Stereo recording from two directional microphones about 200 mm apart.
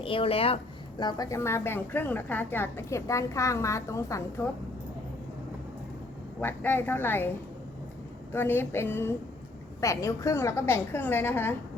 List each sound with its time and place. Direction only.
0.0 s a woman's voice: 25° left (ahead or behind)
6.4 s a woman's voice: 10° left (ahead or behind)
8.3 s a woman's voice: 10° left (ahead or behind)